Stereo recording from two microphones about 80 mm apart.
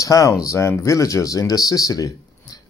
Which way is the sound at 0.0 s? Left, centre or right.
Left.